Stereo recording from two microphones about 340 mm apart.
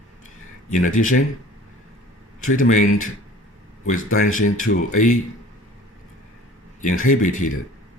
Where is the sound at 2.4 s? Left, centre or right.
Left.